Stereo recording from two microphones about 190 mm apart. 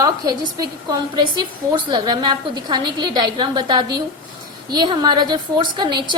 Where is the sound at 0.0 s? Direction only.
20° right (ahead or behind).